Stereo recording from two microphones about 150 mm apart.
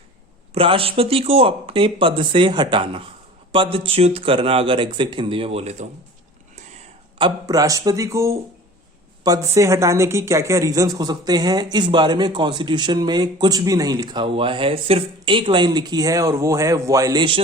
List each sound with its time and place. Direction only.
0.5 s speech: 35° right (ahead or behind)
7.2 s a woman's voice: 25° right (ahead or behind)